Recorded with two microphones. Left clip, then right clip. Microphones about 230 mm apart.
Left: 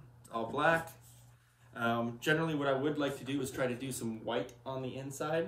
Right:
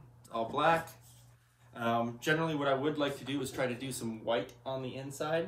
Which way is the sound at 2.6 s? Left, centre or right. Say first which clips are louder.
Right 2 dB; centre.